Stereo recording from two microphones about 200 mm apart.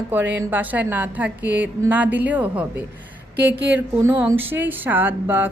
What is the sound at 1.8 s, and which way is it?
Speech, 10° right (ahead or behind).